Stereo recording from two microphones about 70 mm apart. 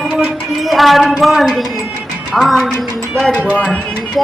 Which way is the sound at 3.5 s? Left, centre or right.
Centre.